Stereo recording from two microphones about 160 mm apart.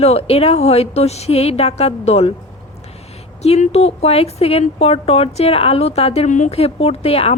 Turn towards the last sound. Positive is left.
turn(degrees=40)  # may be behind; listen again after turning